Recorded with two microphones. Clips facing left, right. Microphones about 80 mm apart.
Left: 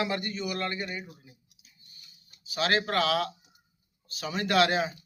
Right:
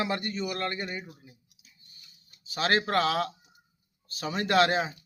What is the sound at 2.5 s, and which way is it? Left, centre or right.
A man's voice, right.